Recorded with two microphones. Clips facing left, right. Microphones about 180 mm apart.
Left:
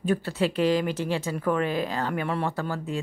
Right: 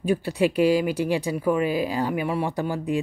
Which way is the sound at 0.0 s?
15° right (ahead or behind).